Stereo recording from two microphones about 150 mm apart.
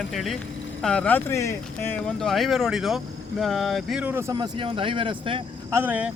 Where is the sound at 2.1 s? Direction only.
Centre (ahead or behind).